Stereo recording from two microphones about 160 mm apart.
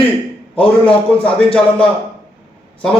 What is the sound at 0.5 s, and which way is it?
Speech, 35° left (ahead or behind).